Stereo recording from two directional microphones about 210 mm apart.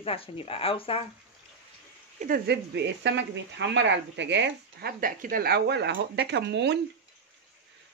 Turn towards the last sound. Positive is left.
turn(degrees=-55)  # may be behind; listen again after turning